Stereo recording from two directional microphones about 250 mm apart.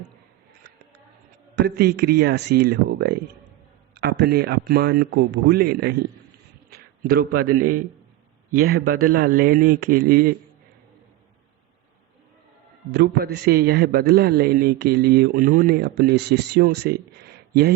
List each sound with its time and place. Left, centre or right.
1.5 s a man's voice: right
12.9 s a man's voice: right